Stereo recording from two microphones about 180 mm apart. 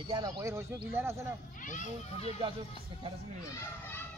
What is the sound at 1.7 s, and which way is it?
Speech, 40° left (ahead or behind).